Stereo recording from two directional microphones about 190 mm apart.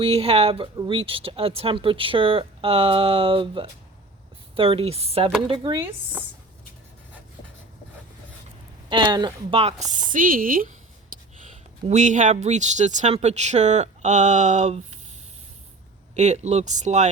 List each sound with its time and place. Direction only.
0.0 s speech: 30° right (ahead or behind)
8.9 s speech: 25° right (ahead or behind); by 10.7 s 50° right (ahead or behind)
11.1 s a sound: 45° right (ahead or behind)
11.9 s speech: 40° right (ahead or behind)
16.1 s speech: 35° right (ahead or behind)